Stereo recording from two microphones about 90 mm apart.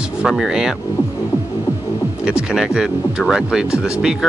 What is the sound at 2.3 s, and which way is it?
Speech, 10° right (ahead or behind).